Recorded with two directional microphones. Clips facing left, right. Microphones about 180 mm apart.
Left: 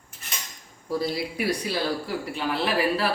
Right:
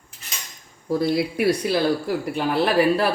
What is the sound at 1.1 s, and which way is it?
A woman's voice, 60° right (ahead or behind).